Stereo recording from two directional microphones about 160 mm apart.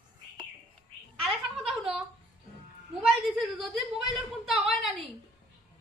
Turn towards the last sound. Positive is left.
turn(degrees=0)  # may be behind; listen again after turning